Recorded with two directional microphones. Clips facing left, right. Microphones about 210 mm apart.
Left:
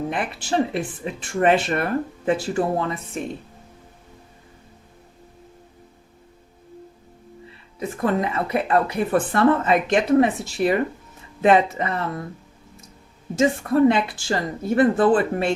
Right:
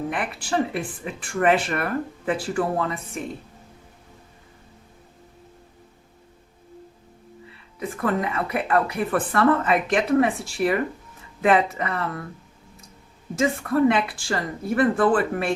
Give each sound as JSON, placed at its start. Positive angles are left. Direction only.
{"t": 0.1, "sound": "speech", "side_deg": 25}
{"t": 7.8, "sound": "speech", "side_deg": 25}
{"t": 13.3, "sound": "speech", "side_deg": 25}